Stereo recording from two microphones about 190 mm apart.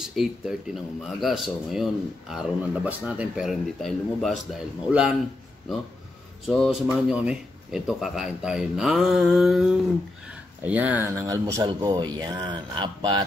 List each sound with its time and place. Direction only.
0.0 s speech: centre (ahead or behind)
6.4 s speech: centre (ahead or behind); by 13.2 s 25° right (ahead or behind)